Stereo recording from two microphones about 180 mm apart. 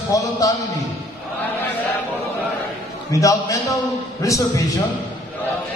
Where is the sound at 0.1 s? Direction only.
20° left (ahead or behind).